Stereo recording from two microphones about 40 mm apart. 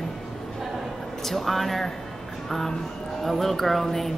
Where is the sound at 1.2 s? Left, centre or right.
Centre.